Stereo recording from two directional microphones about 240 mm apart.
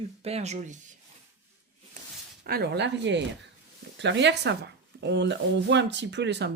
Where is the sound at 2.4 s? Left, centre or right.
Right.